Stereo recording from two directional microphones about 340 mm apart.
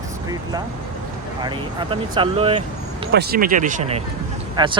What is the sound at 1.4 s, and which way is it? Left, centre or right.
Speech, centre.